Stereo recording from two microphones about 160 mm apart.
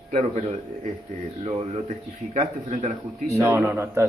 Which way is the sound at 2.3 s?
45° right (ahead or behind).